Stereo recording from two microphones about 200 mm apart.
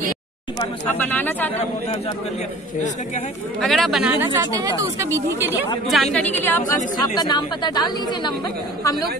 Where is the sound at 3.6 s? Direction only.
Centre (ahead or behind).